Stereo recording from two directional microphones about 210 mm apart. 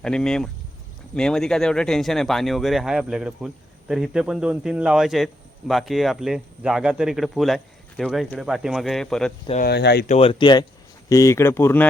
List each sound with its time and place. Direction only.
0.0 s speech: 5° left (ahead or behind)
9.6 s speech: 50° left (ahead or behind)
10.1 s speech: 25° left (ahead or behind); by 11.9 s 10° left (ahead or behind)